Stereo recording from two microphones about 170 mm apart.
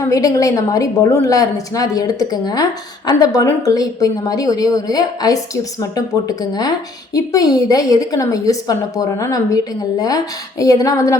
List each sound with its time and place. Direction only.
0.1 s a woman's voice: 20° left (ahead or behind)